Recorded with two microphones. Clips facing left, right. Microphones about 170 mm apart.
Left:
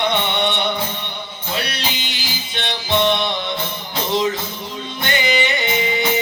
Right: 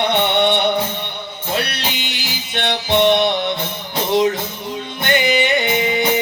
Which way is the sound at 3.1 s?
60° right (ahead or behind).